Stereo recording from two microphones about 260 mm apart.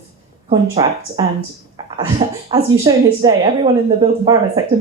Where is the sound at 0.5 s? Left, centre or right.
Centre.